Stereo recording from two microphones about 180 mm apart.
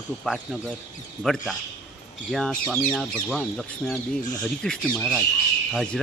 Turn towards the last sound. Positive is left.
turn(degrees=0)  # may be behind; listen again after turning